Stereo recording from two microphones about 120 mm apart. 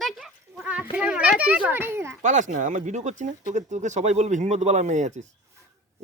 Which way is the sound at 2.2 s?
90° right.